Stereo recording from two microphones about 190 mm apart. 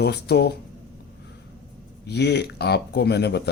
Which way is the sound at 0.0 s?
60° left (ahead or behind).